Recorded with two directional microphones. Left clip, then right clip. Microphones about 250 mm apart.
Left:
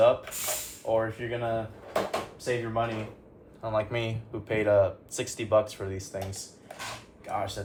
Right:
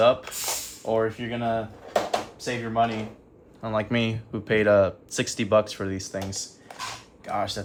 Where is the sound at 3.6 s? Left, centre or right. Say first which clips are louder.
Right 3 dB; right.